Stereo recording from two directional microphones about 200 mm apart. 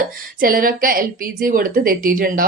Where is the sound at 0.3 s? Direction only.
45° right (ahead or behind).